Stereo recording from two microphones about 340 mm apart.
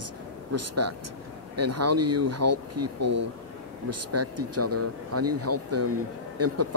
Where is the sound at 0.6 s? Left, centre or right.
Right.